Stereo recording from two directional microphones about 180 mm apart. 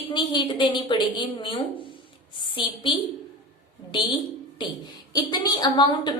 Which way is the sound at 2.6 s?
25° left (ahead or behind).